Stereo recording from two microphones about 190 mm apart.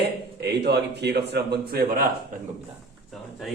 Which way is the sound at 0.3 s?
60° right (ahead or behind).